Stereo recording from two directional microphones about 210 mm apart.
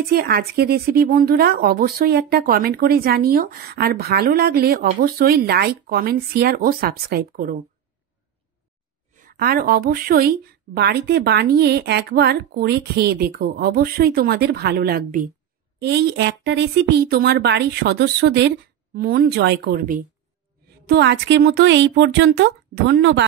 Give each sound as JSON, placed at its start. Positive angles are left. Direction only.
{"t": 0.1, "sound": "speech", "side_deg": -45}
{"t": 9.1, "sound": "speech", "side_deg": -40}